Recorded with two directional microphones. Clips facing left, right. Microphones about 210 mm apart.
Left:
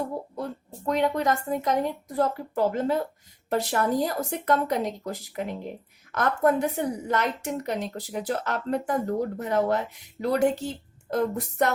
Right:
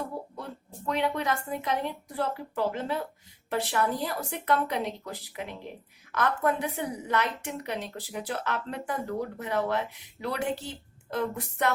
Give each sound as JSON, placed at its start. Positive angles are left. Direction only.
{"t": 0.9, "sound": "a woman's voice", "side_deg": 45}